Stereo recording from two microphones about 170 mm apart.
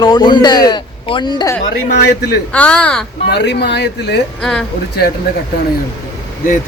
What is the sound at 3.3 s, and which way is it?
Speech, 80° left.